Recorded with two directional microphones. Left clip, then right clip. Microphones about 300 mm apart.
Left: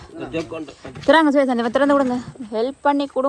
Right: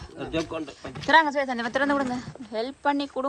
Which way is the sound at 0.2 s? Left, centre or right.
Centre.